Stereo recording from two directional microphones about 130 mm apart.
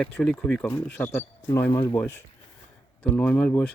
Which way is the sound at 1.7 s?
35° left (ahead or behind).